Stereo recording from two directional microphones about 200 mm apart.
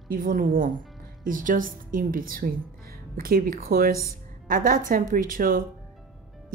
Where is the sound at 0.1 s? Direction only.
45° right (ahead or behind).